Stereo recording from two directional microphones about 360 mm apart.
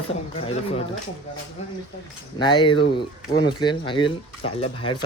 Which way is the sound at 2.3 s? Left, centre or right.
Centre.